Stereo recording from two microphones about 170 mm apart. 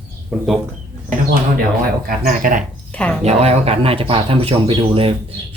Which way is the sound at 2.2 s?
55° right (ahead or behind).